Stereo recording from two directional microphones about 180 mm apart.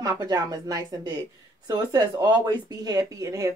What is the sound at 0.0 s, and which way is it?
A woman's voice, 20° right (ahead or behind).